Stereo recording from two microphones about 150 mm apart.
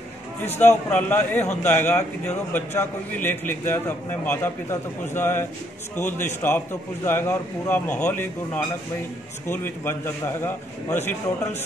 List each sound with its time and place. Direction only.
0.6 s a man's voice: 10° left (ahead or behind)